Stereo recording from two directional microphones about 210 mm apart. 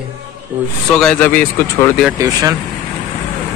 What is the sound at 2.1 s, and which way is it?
Speech, 15° right (ahead or behind).